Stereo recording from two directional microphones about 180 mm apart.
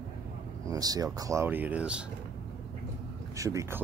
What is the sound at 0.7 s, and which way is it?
Speech, 20° right (ahead or behind).